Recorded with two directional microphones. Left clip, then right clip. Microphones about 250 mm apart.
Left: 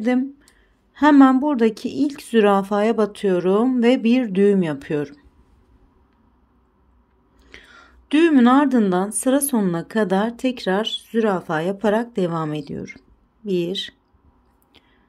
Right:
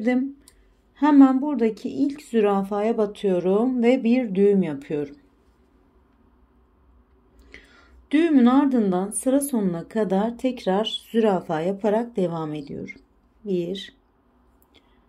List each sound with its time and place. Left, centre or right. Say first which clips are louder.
0.0 s speech: left 2 dB; centre
7.4 s a woman's voice: left 4 dB; centre